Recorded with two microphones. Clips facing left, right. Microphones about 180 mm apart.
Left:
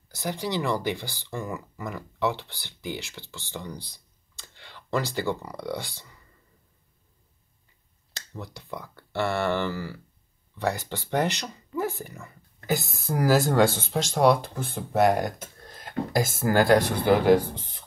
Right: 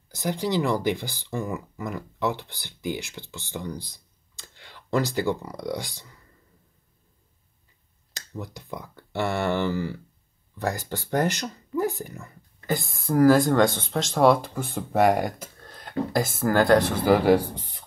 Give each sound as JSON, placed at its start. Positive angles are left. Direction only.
{"t": 0.1, "sound": "speech", "side_deg": -15}
{"t": 4.6, "sound": "a sound", "side_deg": -15}
{"t": 5.6, "sound": "speech", "side_deg": -15}
{"t": 8.4, "sound": "speech", "side_deg": -15}
{"t": 10.9, "sound": "speech", "side_deg": -10}
{"t": 13.1, "sound": "speech", "side_deg": 5}
{"t": 15.6, "sound": "speech", "side_deg": 0}